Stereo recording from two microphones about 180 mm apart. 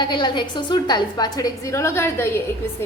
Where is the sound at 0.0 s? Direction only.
25° left (ahead or behind).